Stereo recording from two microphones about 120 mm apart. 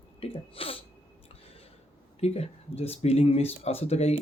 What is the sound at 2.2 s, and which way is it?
Speech, 60° left (ahead or behind).